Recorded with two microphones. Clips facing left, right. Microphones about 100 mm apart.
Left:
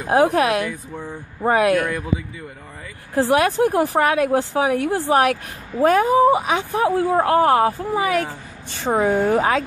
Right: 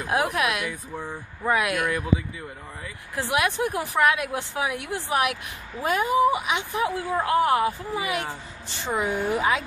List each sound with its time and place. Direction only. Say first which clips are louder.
0.1 s speech: left 8 dB; 35° left (ahead or behind)
3.2 s a woman's voice: left 8 dB; 40° left (ahead or behind)